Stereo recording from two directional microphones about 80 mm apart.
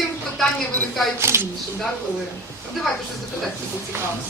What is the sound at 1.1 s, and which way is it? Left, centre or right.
Speech, right.